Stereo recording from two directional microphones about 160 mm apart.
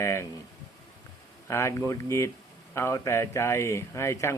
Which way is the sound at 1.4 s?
15° left (ahead or behind).